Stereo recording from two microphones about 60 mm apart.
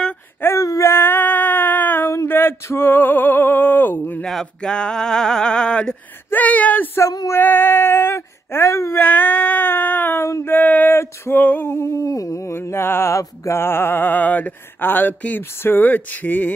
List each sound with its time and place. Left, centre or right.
0.6 s a sound: left
0.8 s female singing: left
2.2 s male singing: left
4.2 s male singing: centre
6.3 s speech: left
9.0 s a sound: left
11.3 s speech: left
11.6 s humming: left
12.6 s mantra: left
13.1 s humming: left
13.6 s speech: left